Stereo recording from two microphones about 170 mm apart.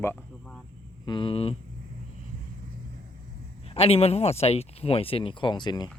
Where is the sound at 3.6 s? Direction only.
35° left (ahead or behind).